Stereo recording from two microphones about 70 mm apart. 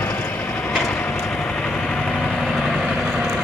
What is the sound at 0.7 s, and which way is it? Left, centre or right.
Vehicle, centre.